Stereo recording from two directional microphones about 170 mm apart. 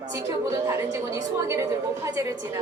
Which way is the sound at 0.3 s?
15° right (ahead or behind).